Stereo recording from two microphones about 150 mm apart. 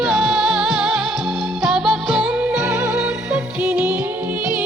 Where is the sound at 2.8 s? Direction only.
20° right (ahead or behind).